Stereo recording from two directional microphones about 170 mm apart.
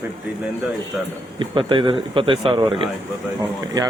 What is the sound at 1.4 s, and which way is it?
Speech, 30° right (ahead or behind).